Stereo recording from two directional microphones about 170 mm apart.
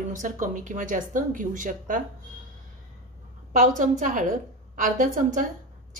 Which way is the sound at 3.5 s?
50° right (ahead or behind).